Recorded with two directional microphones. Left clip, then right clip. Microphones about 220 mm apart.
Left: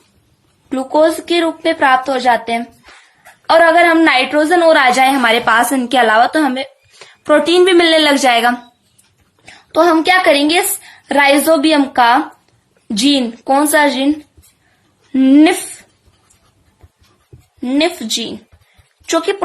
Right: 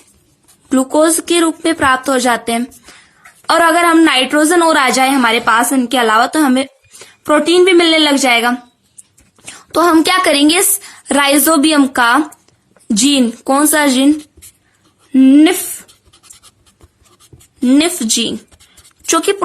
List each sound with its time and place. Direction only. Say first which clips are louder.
0.7 s a woman's voice: right 1 dB; 35° right (ahead or behind); by 8.6 s 15° right (ahead or behind)
9.5 s a woman's voice: even; 40° right (ahead or behind)
15.1 s speech: right 1 dB; 20° right (ahead or behind)
17.6 s a woman's voice: right 3 dB; 40° right (ahead or behind)